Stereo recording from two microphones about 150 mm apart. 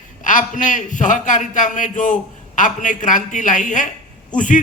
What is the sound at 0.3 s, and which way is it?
A man's voice, 60° left (ahead or behind).